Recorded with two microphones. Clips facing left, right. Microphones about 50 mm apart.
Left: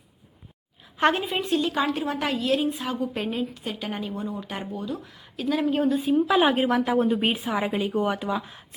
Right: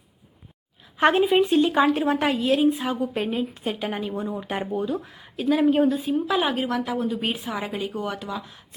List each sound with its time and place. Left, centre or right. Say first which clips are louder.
0.9 s speech: right 5 dB; centre
2.3 s speech: right 4 dB; centre
3.5 s speech: right 4 dB; centre
6.4 s a woman's voice: left 3 dB; centre